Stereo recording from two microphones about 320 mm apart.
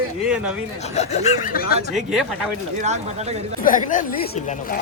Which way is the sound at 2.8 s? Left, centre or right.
Right.